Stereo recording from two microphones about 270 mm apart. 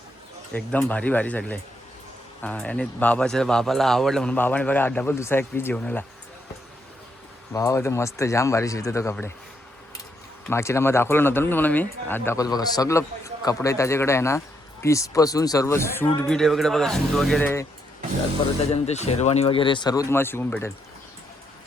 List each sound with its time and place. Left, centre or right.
0.5 s a man's voice: centre
7.5 s speech: centre
10.5 s speech: centre
18.7 s speech: left; by 20.7 s centre